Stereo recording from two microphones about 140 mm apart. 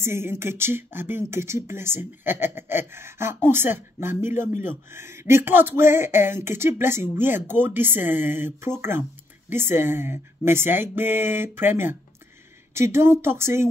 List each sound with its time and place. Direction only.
0.0 s speech: 20° right (ahead or behind)